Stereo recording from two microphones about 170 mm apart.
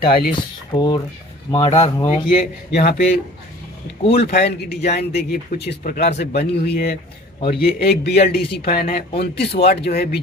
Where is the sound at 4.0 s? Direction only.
35° left (ahead or behind).